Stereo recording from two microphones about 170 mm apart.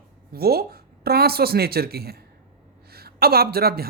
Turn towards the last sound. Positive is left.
turn(degrees=-65)  # may be behind; listen again after turning